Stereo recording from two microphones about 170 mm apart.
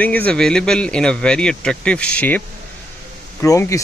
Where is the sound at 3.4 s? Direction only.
15° left (ahead or behind).